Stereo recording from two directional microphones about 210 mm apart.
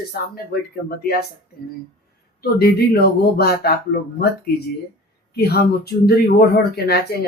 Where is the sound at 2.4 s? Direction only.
50° left (ahead or behind).